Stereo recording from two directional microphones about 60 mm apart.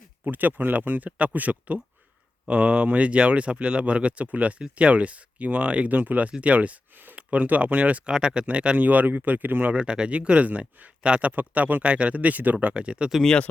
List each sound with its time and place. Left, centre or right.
0.3 s speech: right